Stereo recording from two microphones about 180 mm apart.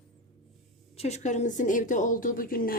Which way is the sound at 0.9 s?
35° left (ahead or behind).